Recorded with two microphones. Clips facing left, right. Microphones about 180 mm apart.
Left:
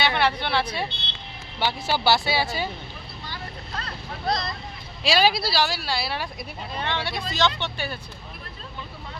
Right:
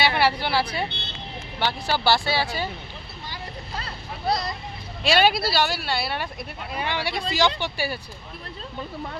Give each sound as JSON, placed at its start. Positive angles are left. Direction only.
{"t": 0.0, "sound": "speech", "side_deg": -5}
{"t": 0.9, "sound": "speech", "side_deg": -60}
{"t": 2.0, "sound": "speech", "side_deg": 10}
{"t": 3.8, "sound": "speech", "side_deg": -10}
{"t": 5.0, "sound": "a woman's voice", "side_deg": 0}
{"t": 5.3, "sound": "speech", "side_deg": -55}
{"t": 5.5, "sound": "a woman's voice", "side_deg": 0}
{"t": 6.7, "sound": "speech", "side_deg": -10}